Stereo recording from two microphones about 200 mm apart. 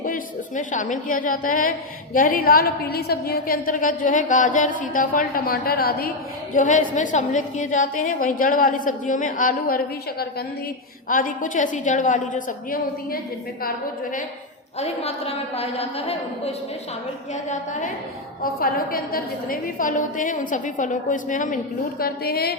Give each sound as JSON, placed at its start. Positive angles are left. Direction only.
{"t": 0.0, "sound": "a woman's voice", "side_deg": 40}
{"t": 14.8, "sound": "a woman's voice", "side_deg": 30}